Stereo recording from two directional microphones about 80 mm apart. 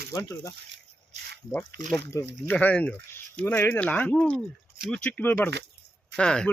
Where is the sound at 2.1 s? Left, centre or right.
Left.